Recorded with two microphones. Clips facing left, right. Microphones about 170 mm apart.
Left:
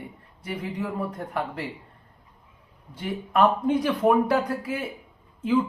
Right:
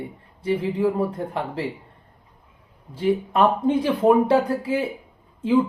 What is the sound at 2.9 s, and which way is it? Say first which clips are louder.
Speech: right 4 dB; 30° right (ahead or behind).